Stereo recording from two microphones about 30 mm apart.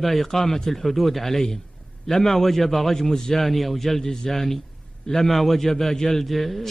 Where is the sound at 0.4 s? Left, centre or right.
Centre.